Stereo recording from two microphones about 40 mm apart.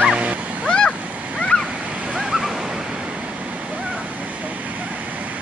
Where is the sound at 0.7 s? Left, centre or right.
Left.